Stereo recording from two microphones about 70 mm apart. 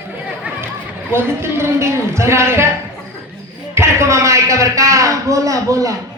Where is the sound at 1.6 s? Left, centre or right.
Right.